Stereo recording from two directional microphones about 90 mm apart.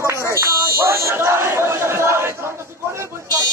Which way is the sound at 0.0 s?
30° right (ahead or behind).